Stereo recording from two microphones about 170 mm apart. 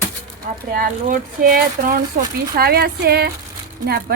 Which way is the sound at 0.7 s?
50° right (ahead or behind).